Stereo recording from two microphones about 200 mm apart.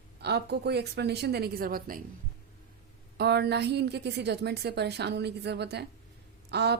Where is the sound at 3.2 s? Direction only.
55° right (ahead or behind).